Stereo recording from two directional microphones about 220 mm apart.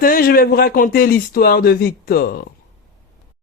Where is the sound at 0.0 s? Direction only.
40° left (ahead or behind).